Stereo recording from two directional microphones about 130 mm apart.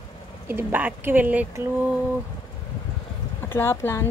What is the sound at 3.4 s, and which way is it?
Speech, 15° left (ahead or behind).